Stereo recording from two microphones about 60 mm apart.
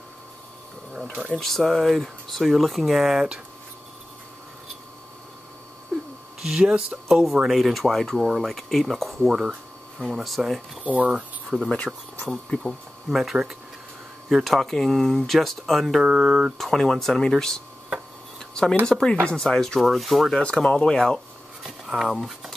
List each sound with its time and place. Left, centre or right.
1.4 s speech: centre
6.4 s speech: centre
9.3 s a sound: centre
10.1 s speech: centre
10.8 s speech: right
11.7 s speech: centre
13.1 s speech: centre
16.0 s speech: centre
16.5 s speech: centre
18.5 s a sound: centre
18.9 s speech: centre
20.3 s speech: centre
21.6 s a sound: centre